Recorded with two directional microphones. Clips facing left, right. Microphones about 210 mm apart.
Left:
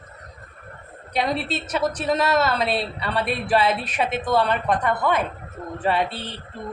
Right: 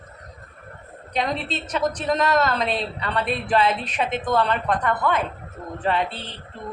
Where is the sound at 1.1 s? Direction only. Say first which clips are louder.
Left 2 dB; 10° left (ahead or behind).